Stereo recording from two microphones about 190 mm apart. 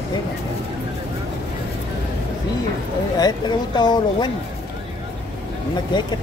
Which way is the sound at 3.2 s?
20° left (ahead or behind).